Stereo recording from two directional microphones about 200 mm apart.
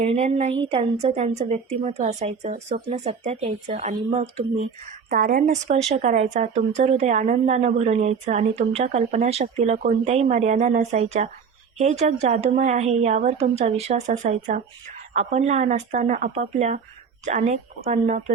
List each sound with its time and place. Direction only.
0.0 s a woman's voice: 35° right (ahead or behind)
5.0 s a woman's voice: 45° right (ahead or behind)